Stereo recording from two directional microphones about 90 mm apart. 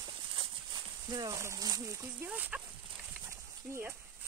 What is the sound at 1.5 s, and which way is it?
Speech, 40° right (ahead or behind).